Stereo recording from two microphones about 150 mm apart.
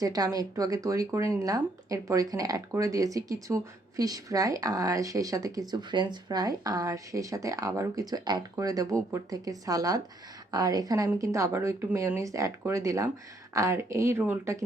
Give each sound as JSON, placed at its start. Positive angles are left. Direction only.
{"t": 0.0, "sound": "speech", "side_deg": -25}